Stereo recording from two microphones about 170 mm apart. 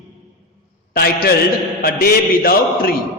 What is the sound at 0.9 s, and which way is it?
A man's voice, 65° left (ahead or behind).